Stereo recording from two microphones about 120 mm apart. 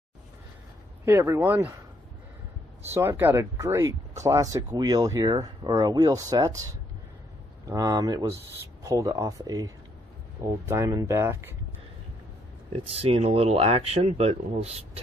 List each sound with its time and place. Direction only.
1.0 s speech: 20° right (ahead or behind)
2.8 s speech: 20° right (ahead or behind)
10.7 s speech: 25° right (ahead or behind)
12.9 s speech: 55° right (ahead or behind)